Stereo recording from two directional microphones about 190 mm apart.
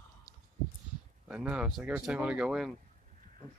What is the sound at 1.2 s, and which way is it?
Speech, 5° right (ahead or behind).